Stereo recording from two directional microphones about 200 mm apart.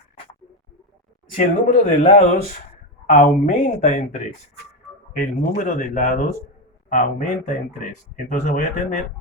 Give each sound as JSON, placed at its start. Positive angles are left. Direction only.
{"t": 1.3, "sound": "speech", "side_deg": 40}
{"t": 3.1, "sound": "speech", "side_deg": 40}